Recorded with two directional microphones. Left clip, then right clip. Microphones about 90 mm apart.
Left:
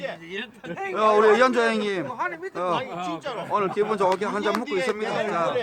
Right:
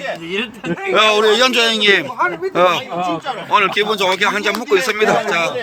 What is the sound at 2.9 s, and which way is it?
Speech, 30° left (ahead or behind).